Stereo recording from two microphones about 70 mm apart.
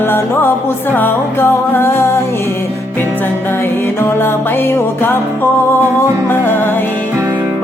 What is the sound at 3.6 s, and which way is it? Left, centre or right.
Music, left.